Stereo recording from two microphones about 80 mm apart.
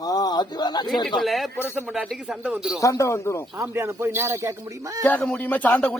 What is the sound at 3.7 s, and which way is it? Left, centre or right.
Speech, right.